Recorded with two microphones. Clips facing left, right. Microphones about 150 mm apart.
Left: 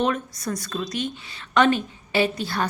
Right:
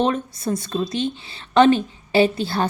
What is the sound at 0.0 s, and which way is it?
A woman's voice, 30° right (ahead or behind).